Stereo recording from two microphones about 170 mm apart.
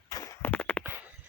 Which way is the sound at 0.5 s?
10° left (ahead or behind).